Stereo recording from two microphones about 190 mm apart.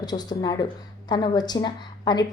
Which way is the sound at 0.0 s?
20° left (ahead or behind).